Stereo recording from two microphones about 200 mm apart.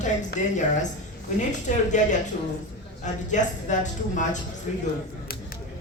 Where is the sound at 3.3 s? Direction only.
40° left (ahead or behind).